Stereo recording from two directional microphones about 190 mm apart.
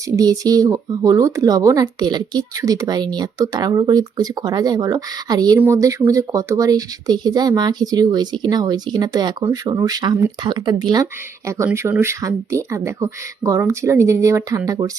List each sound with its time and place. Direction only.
0.2 s speech: 20° right (ahead or behind)